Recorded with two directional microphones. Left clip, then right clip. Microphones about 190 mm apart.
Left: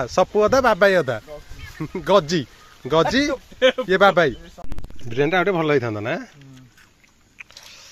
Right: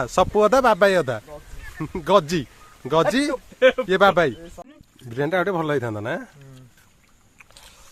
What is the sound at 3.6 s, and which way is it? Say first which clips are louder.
Speech: right 1 dB; 25° left (ahead or behind).